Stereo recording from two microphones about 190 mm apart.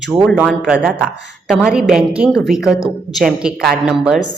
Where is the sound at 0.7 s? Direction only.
5° right (ahead or behind).